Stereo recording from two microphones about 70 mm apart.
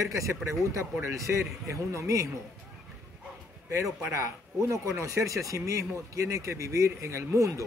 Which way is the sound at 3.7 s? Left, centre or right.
Right.